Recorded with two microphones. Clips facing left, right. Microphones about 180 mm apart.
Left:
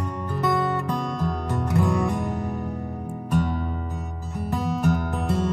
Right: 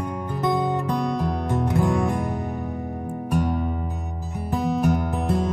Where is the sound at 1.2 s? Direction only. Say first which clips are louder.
Right 3 dB; centre (ahead or behind).